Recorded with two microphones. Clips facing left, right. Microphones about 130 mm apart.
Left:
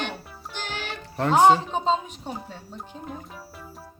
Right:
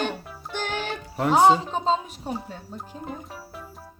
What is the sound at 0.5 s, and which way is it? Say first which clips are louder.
Music: right 5 dB; 50° right (ahead or behind).